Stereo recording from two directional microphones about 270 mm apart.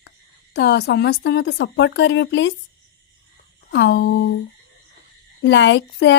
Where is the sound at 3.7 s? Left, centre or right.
Left.